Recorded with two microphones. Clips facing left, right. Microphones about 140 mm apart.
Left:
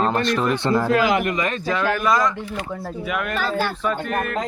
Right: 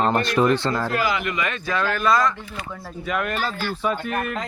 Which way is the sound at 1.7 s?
15° left (ahead or behind).